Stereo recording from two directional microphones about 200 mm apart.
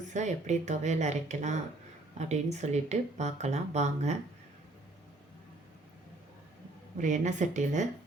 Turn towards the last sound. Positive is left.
turn(degrees=-35)  # may be behind; listen again after turning